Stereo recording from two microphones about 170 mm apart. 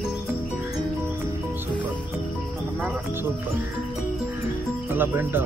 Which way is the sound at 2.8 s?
10° right (ahead or behind).